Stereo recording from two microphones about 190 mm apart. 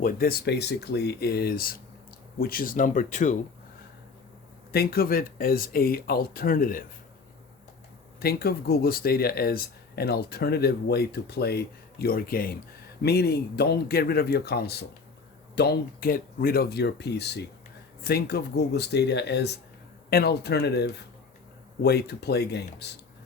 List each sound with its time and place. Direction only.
0.0 s speech: 50° left (ahead or behind)
4.7 s speech: 55° left (ahead or behind)
8.2 s speech: 55° left (ahead or behind)